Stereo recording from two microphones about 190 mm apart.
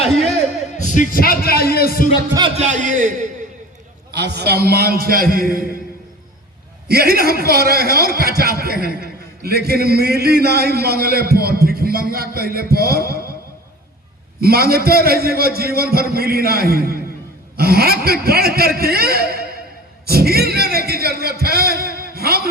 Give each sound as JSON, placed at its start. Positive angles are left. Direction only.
{"t": 0.8, "sound": "a sound", "side_deg": 40}
{"t": 2.6, "sound": "a man's voice", "side_deg": -40}
{"t": 4.1, "sound": "a man's voice", "side_deg": -60}
{"t": 6.8, "sound": "a man's voice", "side_deg": -55}
{"t": 14.4, "sound": "a man's voice", "side_deg": -55}